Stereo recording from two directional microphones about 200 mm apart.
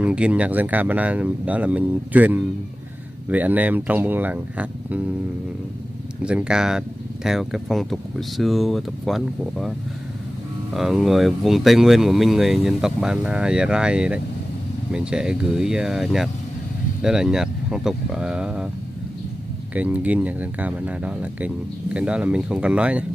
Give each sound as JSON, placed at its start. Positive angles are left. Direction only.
{"t": 0.0, "sound": "speech", "side_deg": -5}
{"t": 6.2, "sound": "speech", "side_deg": -5}
{"t": 19.7, "sound": "speech", "side_deg": -5}